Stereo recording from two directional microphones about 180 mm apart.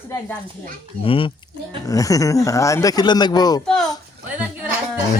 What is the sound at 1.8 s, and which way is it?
Speech, 20° left (ahead or behind).